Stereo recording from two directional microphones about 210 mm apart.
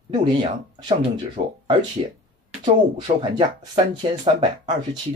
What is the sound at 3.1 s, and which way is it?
Speech, 35° right (ahead or behind).